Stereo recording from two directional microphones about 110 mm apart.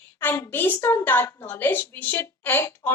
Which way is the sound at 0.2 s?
20° left (ahead or behind).